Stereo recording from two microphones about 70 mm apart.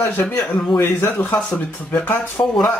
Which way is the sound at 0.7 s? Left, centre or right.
Left.